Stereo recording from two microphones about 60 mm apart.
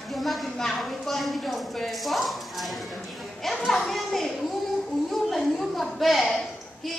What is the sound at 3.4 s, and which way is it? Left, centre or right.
Children playing, centre.